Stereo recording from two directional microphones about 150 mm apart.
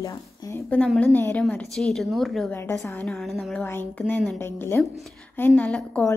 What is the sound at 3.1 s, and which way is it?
A woman's voice, centre (ahead or behind).